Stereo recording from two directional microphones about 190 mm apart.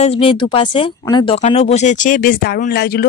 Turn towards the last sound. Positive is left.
turn(degrees=55)  # may be behind; listen again after turning